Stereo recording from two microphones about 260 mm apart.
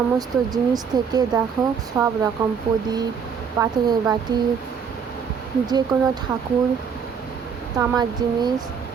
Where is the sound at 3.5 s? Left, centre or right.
Centre.